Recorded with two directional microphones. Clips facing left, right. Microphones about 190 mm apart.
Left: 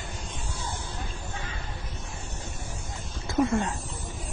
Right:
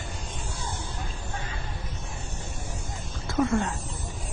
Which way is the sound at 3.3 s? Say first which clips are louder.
Even; 20° left (ahead or behind).